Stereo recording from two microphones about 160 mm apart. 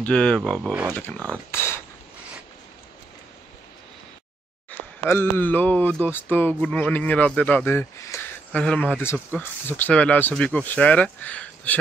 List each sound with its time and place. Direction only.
0.0 s speech: 5° left (ahead or behind)
1.5 s pig: 15° left (ahead or behind)
4.6 s speech: 15° left (ahead or behind)
8.5 s speech: 5° left (ahead or behind)
9.0 s speech: 15° left (ahead or behind)